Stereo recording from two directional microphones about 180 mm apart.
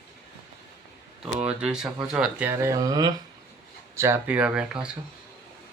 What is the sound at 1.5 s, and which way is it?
Speech, 5° right (ahead or behind).